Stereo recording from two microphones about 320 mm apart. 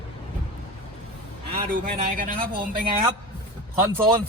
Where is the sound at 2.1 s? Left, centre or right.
Right.